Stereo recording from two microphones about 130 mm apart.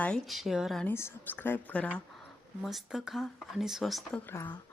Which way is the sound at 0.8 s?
20° left (ahead or behind).